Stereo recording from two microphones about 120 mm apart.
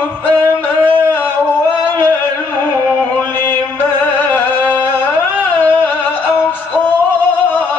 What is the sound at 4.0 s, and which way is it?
Music, 15° left (ahead or behind).